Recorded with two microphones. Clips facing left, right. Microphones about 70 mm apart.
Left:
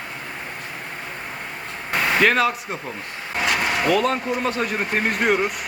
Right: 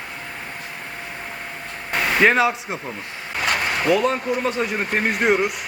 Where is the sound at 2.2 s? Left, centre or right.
Centre.